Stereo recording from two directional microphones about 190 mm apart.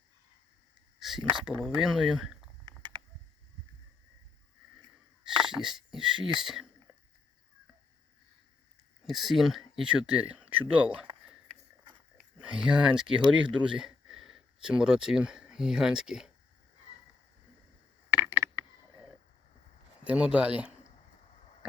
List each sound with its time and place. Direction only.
0.9 s a sound: centre (ahead or behind)
1.2 s speech: 25° right (ahead or behind)
1.6 s speech: centre (ahead or behind)
2.6 s a sound: 25° right (ahead or behind)
5.4 s speech: centre (ahead or behind)
9.0 s speech: centre (ahead or behind)
12.4 s speech: 5° right (ahead or behind)
18.1 s mechanisms: 10° right (ahead or behind)
20.1 s speech: 5° right (ahead or behind)